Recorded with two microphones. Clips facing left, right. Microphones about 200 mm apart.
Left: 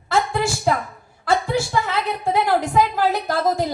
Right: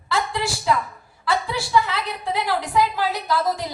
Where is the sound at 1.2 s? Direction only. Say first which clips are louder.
Left 4 dB; 50° left (ahead or behind).